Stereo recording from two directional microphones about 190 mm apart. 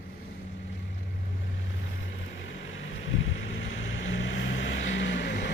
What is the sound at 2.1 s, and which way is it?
Vehicle, 80° left.